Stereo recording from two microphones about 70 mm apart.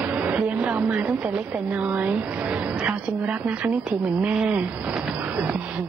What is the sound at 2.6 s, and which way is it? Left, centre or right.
A woman's voice, centre.